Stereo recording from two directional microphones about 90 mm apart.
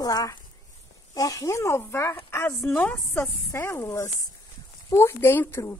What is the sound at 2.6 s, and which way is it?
Speech, 5° left (ahead or behind).